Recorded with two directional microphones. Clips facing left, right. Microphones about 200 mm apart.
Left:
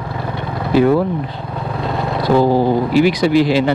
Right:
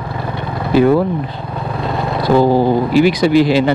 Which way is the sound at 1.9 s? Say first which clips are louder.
Right 1 dB; 25° right (ahead or behind).